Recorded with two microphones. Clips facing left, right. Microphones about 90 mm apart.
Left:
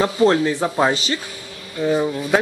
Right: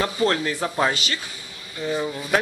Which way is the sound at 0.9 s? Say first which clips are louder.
Left 5 dB; 30° left (ahead or behind).